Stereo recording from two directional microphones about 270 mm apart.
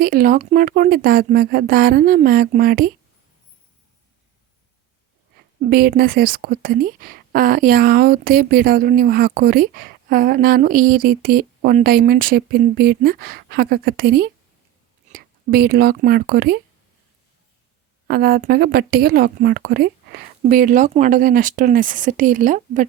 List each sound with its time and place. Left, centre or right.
0.0 s speech: right
5.5 s speech: right
18.1 s speech: right